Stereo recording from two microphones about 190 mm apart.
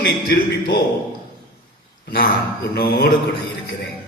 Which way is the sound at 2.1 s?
55° left (ahead or behind).